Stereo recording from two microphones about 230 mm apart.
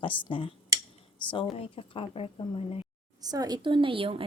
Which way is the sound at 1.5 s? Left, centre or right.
Left.